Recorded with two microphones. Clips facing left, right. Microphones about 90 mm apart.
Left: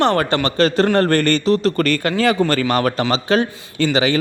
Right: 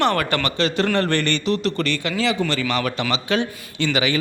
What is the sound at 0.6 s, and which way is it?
A man's voice, 45° left (ahead or behind).